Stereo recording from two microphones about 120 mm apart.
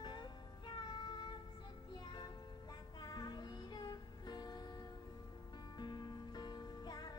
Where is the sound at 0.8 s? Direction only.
40° left (ahead or behind).